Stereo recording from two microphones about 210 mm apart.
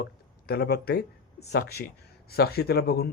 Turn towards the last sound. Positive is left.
turn(degrees=45)  # may be behind; listen again after turning